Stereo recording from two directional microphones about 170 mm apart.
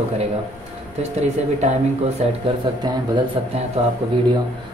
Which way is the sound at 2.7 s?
30° right (ahead or behind).